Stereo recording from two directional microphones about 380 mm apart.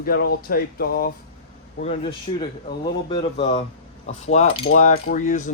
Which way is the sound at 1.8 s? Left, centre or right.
Centre.